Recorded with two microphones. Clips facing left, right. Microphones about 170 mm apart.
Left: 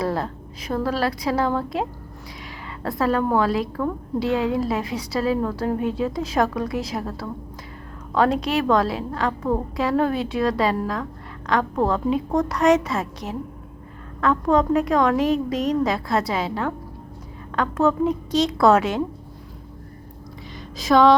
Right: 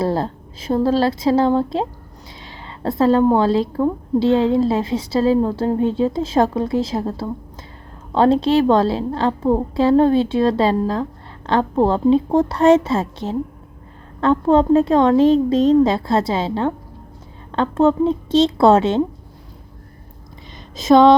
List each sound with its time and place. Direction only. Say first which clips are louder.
0.0 s a woman's voice: right 5 dB; 30° right (ahead or behind)
20.7 s a woman's voice: right 5 dB; 25° right (ahead or behind)